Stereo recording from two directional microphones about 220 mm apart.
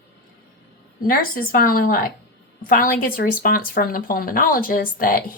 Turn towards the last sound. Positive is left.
turn(degrees=40)  # may be behind; listen again after turning